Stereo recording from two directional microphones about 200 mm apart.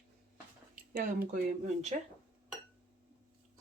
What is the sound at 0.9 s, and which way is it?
Speech, 40° right (ahead or behind).